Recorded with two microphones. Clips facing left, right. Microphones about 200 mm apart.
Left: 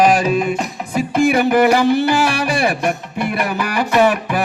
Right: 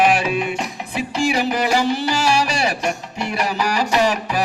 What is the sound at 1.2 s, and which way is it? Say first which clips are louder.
Music: left 7 dB; 55° left (ahead or behind).